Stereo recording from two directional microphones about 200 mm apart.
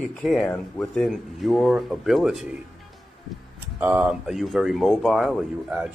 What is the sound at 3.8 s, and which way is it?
Speech, 5° right (ahead or behind).